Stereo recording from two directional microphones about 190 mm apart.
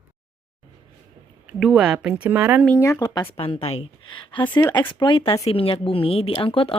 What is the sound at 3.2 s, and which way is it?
Speech, 30° left (ahead or behind).